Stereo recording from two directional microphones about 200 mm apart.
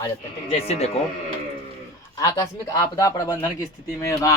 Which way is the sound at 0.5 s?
30° left (ahead or behind).